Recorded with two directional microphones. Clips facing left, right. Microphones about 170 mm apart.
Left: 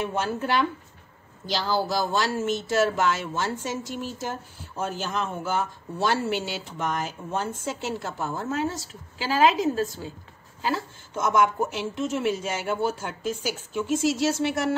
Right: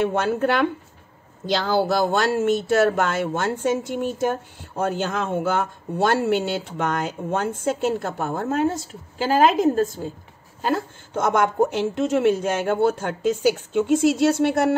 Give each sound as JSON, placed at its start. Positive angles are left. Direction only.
{"t": 0.0, "sound": "a woman's voice", "side_deg": -65}